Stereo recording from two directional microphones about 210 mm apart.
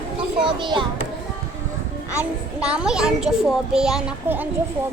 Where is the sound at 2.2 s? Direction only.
5° right (ahead or behind).